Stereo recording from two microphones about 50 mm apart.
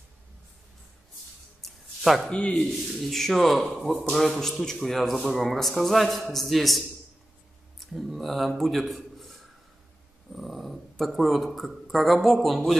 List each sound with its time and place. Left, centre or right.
2.2 s speech: centre
2.7 s speech: centre
7.8 s speech: centre